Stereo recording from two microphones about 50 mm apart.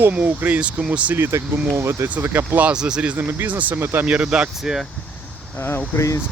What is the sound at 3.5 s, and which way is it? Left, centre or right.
Speech, right.